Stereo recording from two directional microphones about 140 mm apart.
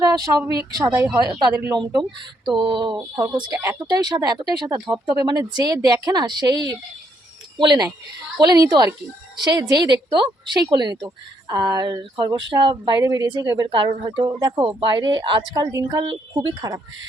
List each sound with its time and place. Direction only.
0.0 s speech: 25° right (ahead or behind)